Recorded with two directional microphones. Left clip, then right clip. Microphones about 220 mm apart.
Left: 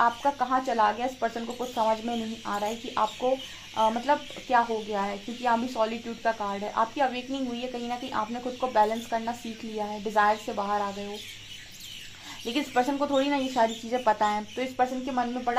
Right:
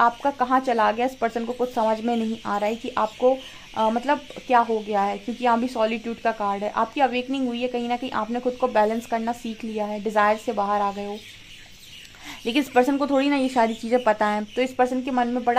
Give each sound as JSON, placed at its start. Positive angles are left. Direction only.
{"t": 0.0, "sound": "speech", "side_deg": -45}
{"t": 12.4, "sound": "speech", "side_deg": -45}